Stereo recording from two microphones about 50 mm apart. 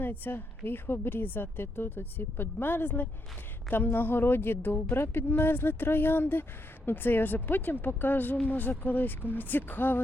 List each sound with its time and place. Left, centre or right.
0.0 s a woman's voice: left